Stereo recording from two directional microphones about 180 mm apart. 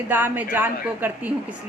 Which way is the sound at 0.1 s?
10° right (ahead or behind).